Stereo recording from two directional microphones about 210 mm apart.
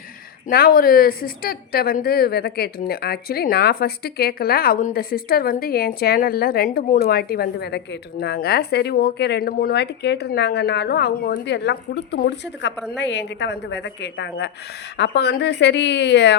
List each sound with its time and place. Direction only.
0.4 s a woman's voice: 45° left (ahead or behind)